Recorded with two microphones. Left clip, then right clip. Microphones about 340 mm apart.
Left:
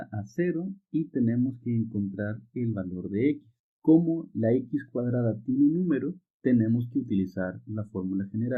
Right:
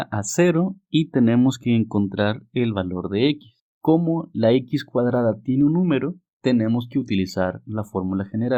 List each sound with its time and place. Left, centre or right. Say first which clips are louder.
0.0 s speech: right 11 dB; right